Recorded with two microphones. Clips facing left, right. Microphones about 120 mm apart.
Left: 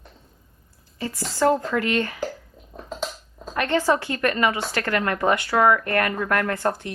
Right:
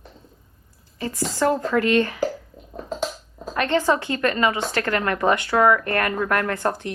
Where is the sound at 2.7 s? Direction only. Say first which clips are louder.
Right 4 dB; centre (ahead or behind).